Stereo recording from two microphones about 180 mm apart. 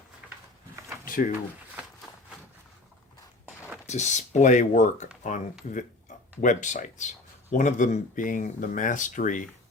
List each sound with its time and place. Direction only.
1.0 s a sound: 50° left (ahead or behind)
3.8 s speech: 40° left (ahead or behind)
6.4 s speech: 40° left (ahead or behind)